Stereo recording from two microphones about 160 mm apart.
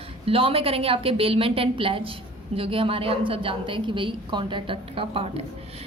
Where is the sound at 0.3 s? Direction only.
35° right (ahead or behind).